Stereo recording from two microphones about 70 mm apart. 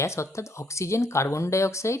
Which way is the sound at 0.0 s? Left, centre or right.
Left.